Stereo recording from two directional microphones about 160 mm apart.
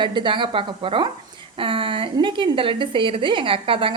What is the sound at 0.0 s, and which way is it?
A woman's voice, 30° right (ahead or behind).